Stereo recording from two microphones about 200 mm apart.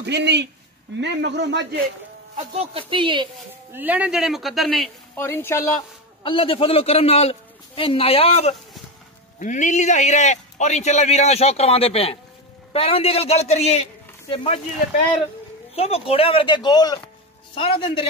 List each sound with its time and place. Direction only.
0.0 s a man's voice: 60° right (ahead or behind)
2.3 s a woman's voice: 30° right (ahead or behind)
3.7 s speech: 10° right (ahead or behind)
5.1 s speech: 10° left (ahead or behind)
6.2 s a man's voice: 25° left (ahead or behind)
15.7 s a man's voice: 30° left (ahead or behind)